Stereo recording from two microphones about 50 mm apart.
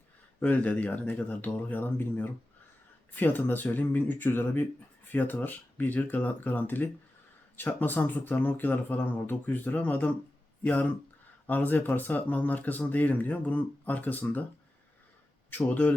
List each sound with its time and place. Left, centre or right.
0.3 s speech: left
15.4 s speech: left